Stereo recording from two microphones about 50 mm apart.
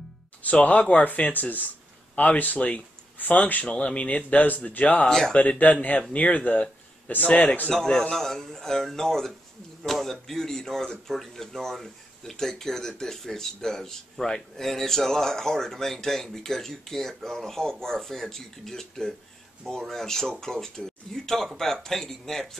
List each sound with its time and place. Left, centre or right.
0.4 s speech: left
3.6 s speech: left
5.0 s speech: centre
5.3 s speech: left
7.7 s speech: centre